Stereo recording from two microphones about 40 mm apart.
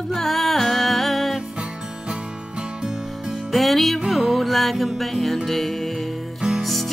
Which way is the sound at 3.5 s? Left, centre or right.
Centre.